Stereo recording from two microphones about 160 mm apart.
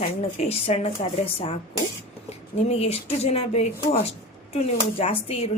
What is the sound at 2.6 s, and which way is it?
Speech, 40° left (ahead or behind).